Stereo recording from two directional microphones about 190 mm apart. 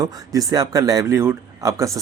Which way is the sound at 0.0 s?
20° right (ahead or behind).